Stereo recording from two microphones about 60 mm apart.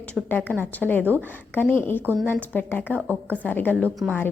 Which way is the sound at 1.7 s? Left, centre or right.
Left.